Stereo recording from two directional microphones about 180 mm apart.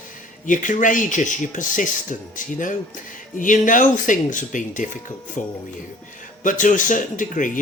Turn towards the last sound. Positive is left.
turn(degrees=45)  # may be behind; listen again after turning